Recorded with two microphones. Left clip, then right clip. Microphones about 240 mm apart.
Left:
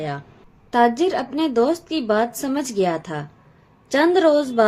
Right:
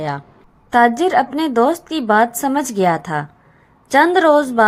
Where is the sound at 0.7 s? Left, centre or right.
Centre.